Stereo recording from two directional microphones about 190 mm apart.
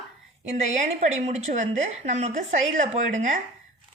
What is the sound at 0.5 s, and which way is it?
A woman's voice, 35° right (ahead or behind).